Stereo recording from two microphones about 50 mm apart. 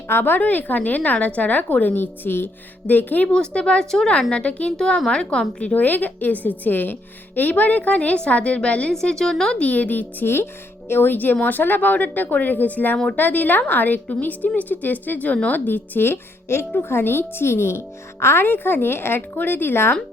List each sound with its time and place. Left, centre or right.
0.1 s a woman's voice: left
3.3 s a woman's voice: centre
4.9 s a woman's voice: centre
5.7 s a woman's voice: left
8.9 s a woman's voice: centre
9.6 s a woman's voice: left
18.4 s speech: left